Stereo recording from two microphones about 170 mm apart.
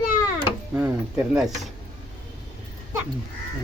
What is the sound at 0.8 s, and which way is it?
Speech, 10° right (ahead or behind).